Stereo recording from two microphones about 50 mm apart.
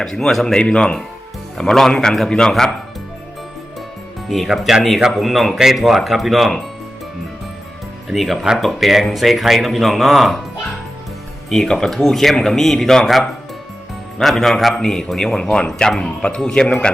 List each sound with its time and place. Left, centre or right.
0.0 s a man's voice: centre
0.6 s speech: left
1.5 s a man's voice: centre
4.4 s speech: centre
8.1 s speech: centre
11.4 s a man's voice: centre